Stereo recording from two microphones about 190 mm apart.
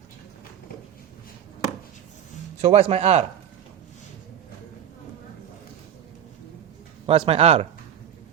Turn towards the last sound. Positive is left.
turn(degrees=-30)  # may be behind; listen again after turning